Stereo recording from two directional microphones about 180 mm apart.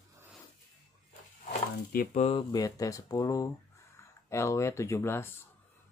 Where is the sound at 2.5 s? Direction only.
20° left (ahead or behind).